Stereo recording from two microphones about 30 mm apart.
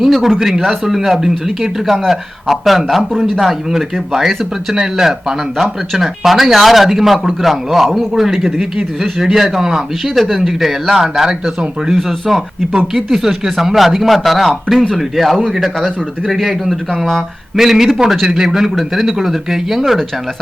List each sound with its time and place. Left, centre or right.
0.0 s a sound: centre
0.3 s speech: centre
0.6 s speech: centre
4.7 s speech: centre
6.0 s speech: centre
10.2 s speech: centre
10.9 s speech: centre
12.7 s speech: centre
17.6 s speech: centre